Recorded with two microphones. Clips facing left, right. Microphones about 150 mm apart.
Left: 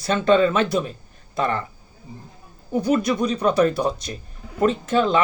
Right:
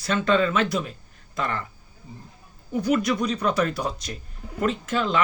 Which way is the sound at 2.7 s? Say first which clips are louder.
Left 2 dB; 30° left (ahead or behind).